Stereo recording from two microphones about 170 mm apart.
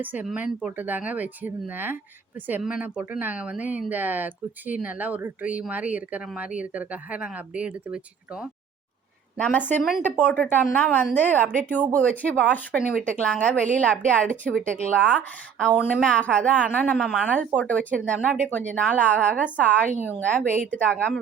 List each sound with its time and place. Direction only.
0.0 s speech: 10° right (ahead or behind)
9.4 s a woman's voice: 10° left (ahead or behind)
20.5 s a woman's voice: 50° right (ahead or behind)
20.7 s a woman's voice: 5° left (ahead or behind)